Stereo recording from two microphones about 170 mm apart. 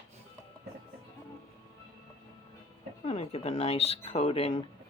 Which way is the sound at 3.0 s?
40° left (ahead or behind).